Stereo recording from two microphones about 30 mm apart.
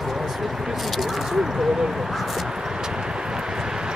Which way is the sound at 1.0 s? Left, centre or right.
Centre.